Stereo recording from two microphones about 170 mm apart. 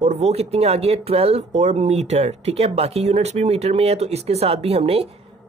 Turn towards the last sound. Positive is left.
turn(degrees=-35)  # may be behind; listen again after turning